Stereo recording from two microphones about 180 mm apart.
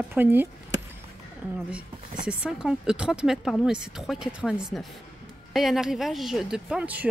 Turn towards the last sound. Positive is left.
turn(degrees=-10)  # may be behind; listen again after turning